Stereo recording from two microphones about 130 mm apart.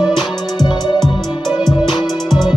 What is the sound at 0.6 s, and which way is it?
Music, 35° left (ahead or behind).